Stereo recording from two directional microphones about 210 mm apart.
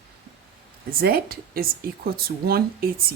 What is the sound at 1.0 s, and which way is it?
Speech, 45° right (ahead or behind).